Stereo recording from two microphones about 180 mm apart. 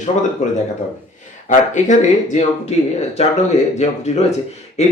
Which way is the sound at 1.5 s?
45° left (ahead or behind).